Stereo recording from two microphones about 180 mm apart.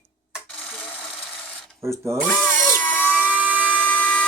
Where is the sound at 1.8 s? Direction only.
15° right (ahead or behind).